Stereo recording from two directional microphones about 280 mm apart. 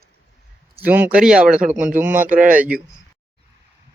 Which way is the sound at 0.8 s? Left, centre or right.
Centre.